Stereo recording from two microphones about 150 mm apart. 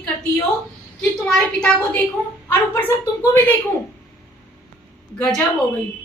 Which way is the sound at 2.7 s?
15° left (ahead or behind).